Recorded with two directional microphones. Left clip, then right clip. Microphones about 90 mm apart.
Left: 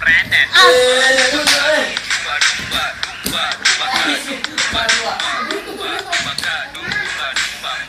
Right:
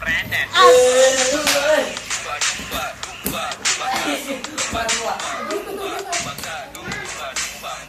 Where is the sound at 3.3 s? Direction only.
35° right (ahead or behind).